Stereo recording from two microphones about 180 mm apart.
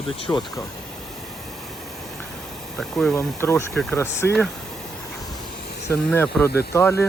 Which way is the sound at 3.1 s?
15° left (ahead or behind).